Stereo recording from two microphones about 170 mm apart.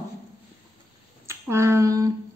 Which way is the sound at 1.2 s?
15° right (ahead or behind).